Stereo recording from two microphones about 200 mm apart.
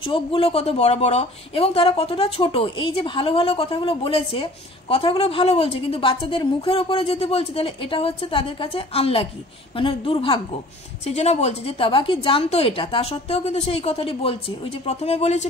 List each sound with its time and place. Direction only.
0.0 s a woman's voice: 25° left (ahead or behind)